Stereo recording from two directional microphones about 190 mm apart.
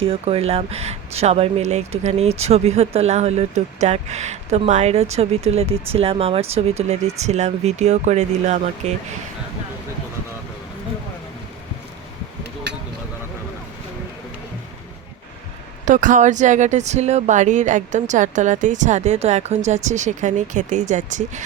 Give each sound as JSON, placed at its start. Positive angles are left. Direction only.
{"t": 0.0, "sound": "speech", "side_deg": -30}
{"t": 15.9, "sound": "speech", "side_deg": -40}